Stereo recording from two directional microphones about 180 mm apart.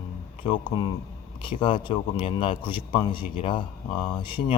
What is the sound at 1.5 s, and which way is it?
A man's voice, 30° left (ahead or behind).